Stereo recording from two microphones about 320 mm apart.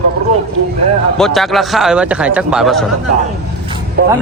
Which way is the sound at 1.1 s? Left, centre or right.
Centre.